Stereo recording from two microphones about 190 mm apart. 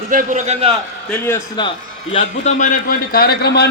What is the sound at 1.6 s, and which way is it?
A man's voice, 30° left (ahead or behind).